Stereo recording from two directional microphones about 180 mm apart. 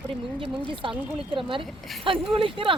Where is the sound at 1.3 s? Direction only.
30° right (ahead or behind).